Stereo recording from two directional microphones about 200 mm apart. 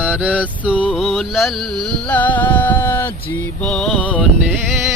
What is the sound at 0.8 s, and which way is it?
Music, centre (ahead or behind).